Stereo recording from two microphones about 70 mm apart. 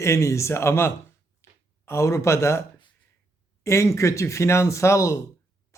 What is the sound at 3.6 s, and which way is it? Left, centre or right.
Speech, left.